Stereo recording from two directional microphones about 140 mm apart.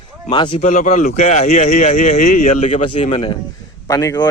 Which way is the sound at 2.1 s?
80° left.